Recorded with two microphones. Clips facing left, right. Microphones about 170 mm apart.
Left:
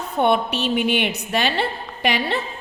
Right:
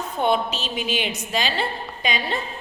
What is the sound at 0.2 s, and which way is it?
A woman's voice, 60° left (ahead or behind).